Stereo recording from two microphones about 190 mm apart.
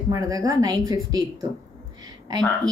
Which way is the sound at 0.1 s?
20° right (ahead or behind).